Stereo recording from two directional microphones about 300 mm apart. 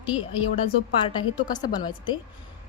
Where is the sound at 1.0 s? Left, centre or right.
Centre.